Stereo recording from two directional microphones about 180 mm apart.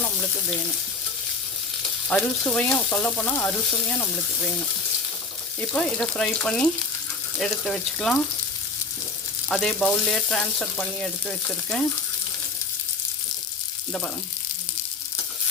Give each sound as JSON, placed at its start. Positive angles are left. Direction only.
{"t": 0.0, "sound": "frying", "side_deg": 5}
{"t": 2.0, "sound": "frying", "side_deg": 5}
{"t": 5.5, "sound": "frying", "side_deg": 5}
{"t": 9.5, "sound": "frying", "side_deg": 5}